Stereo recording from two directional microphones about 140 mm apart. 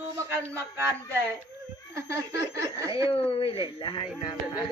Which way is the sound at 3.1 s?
40° left (ahead or behind).